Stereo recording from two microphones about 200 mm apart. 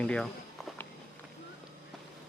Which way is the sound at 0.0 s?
5° left (ahead or behind).